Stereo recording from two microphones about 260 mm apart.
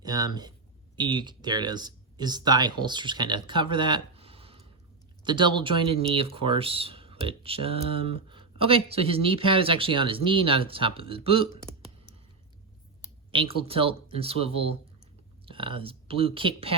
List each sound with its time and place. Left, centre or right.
0.0 s speech: centre
13.3 s speech: right